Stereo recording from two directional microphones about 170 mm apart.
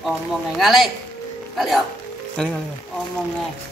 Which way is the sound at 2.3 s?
5° left (ahead or behind).